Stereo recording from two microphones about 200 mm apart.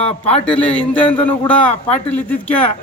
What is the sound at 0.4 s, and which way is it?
A man's voice, 5° left (ahead or behind).